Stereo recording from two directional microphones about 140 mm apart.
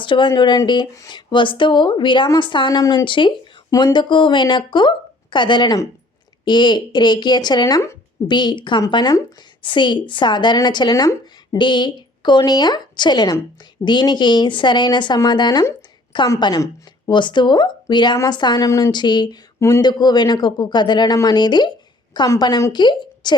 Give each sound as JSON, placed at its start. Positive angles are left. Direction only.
{"t": 0.0, "sound": "a woman's voice", "side_deg": 35}